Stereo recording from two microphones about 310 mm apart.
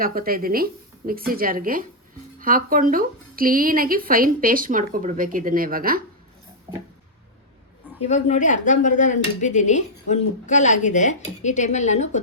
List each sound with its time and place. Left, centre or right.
0.0 s a woman's voice: right
8.0 s speech: left